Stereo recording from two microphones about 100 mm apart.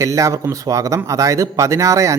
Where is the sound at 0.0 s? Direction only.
30° right (ahead or behind).